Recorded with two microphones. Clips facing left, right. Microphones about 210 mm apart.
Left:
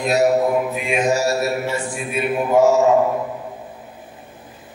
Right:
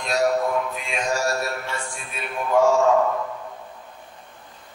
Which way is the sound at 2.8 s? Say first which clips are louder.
Left 3 dB; 20° left (ahead or behind).